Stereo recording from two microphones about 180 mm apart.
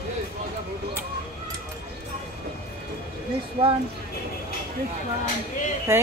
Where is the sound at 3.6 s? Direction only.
30° right (ahead or behind).